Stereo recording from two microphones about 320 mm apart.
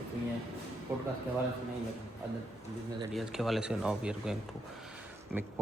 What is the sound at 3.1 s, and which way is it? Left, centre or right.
A man's voice, centre.